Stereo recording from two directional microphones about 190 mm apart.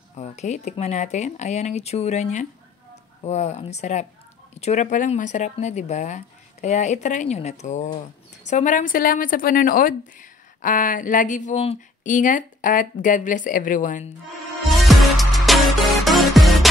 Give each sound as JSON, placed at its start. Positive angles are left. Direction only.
{"t": 0.1, "sound": "speech", "side_deg": 35}
{"t": 14.7, "sound": "music", "side_deg": 0}